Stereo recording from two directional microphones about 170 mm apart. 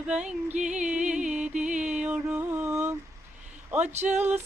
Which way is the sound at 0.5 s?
45° right (ahead or behind).